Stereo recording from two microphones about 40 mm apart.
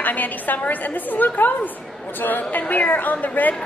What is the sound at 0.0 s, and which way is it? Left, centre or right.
A woman's voice, left.